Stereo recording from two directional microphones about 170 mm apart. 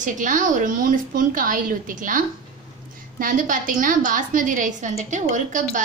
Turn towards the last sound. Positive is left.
turn(degrees=-50)  # may be behind; listen again after turning